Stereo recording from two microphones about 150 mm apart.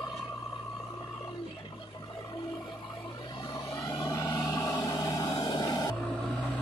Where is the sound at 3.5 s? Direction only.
25° left (ahead or behind).